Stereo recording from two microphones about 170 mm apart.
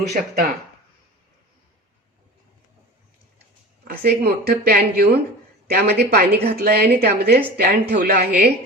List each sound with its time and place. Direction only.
0.1 s speech: 50° right (ahead or behind)
3.8 s a woman's voice: 65° right (ahead or behind)